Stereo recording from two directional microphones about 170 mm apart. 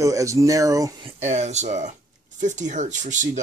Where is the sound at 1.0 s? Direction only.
40° right (ahead or behind).